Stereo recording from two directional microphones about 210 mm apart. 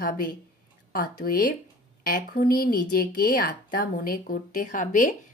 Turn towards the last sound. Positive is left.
turn(degrees=40)  # may be behind; listen again after turning